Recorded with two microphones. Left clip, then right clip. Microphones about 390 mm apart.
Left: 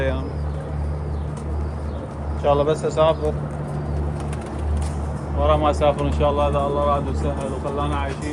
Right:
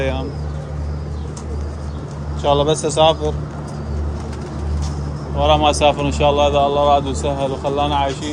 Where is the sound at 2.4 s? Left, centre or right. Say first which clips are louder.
Right 3 dB; centre.